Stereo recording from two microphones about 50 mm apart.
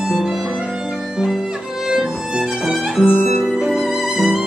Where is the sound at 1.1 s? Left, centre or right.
Centre.